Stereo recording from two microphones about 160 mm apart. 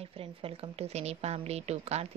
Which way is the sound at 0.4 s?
40° right (ahead or behind).